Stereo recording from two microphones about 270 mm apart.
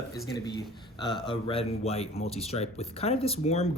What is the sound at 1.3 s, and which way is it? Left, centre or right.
Speech, centre.